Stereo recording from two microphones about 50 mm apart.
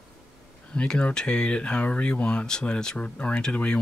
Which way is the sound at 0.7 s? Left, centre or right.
Left.